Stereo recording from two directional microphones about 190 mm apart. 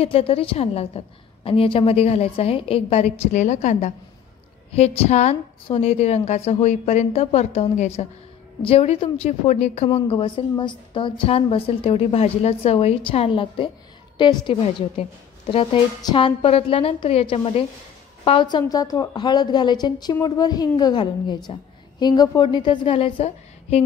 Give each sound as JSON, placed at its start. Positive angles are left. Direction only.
{"t": 0.0, "sound": "a woman's voice", "side_deg": 30}